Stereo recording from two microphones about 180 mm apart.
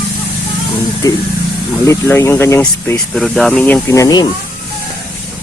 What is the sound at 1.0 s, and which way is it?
Speech, 20° left (ahead or behind).